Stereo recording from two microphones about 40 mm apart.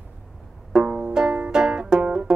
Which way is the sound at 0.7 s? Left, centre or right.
Centre.